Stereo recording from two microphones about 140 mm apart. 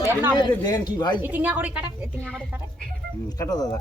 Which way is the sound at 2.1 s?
10° left (ahead or behind).